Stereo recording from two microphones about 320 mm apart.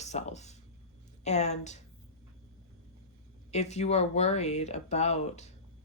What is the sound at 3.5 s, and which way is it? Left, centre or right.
A woman's voice, left.